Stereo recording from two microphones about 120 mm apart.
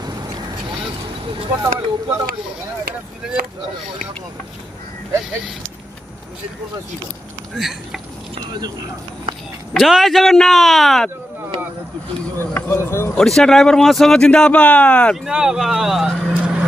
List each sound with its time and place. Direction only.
1.6 s speech: 25° right (ahead or behind)
7.5 s speech: centre (ahead or behind)
8.4 s speech: 35° right (ahead or behind)
9.8 s speech: centre (ahead or behind)
12.4 s speech: 20° left (ahead or behind)
13.2 s speech: 5° left (ahead or behind)
15.2 s speech: 5° right (ahead or behind)